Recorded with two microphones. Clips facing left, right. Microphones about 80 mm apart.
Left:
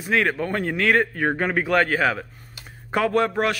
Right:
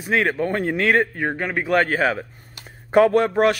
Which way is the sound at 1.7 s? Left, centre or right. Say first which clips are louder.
Right 3 dB; right.